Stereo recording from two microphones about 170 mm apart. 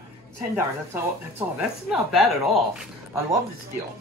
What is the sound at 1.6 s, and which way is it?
A woman's voice, centre (ahead or behind).